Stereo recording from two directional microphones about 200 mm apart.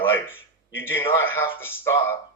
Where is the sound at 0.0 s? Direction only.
10° left (ahead or behind).